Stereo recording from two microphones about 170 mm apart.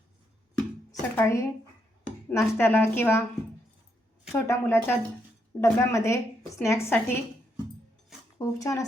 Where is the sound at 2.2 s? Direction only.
15° left (ahead or behind).